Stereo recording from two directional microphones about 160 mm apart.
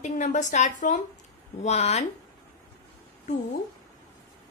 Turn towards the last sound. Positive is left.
turn(degrees=50)  # may be behind; listen again after turning